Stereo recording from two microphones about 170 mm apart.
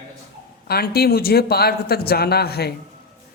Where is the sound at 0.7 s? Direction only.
65° left (ahead or behind).